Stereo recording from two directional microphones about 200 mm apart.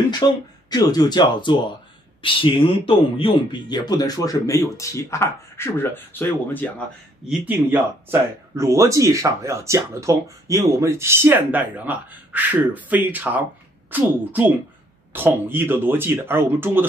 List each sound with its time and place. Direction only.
0.2 s speech: 20° left (ahead or behind)
7.2 s speech: 10° right (ahead or behind)